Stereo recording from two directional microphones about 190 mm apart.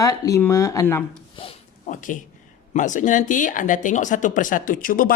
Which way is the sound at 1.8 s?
45° left (ahead or behind).